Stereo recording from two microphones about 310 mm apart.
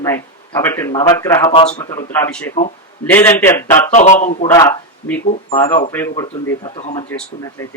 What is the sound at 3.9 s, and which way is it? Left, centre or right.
Speech, left.